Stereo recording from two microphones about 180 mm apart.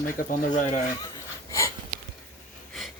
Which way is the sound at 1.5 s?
15° left (ahead or behind).